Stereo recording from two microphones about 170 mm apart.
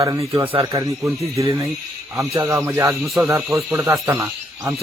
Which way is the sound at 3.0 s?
Centre (ahead or behind).